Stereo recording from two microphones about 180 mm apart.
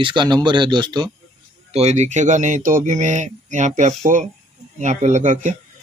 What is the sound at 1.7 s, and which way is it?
Speech, 40° right (ahead or behind).